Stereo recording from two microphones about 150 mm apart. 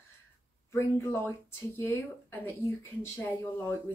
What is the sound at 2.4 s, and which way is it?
Speech, 15° left (ahead or behind).